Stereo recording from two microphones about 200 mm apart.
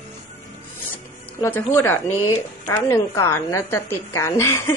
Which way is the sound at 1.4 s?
10° left (ahead or behind).